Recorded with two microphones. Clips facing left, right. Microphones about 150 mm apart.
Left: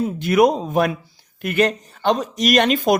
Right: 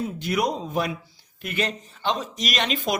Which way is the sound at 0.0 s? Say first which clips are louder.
Left 9 dB; 55° left (ahead or behind).